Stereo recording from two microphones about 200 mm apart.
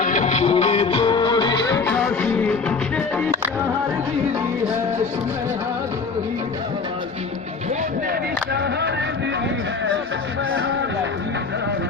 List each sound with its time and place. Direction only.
0.0 s music: 40° left (ahead or behind); by 2.7 s 5° left (ahead or behind)